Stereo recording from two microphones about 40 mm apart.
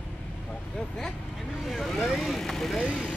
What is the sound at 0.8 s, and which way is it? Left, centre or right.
Speech, centre.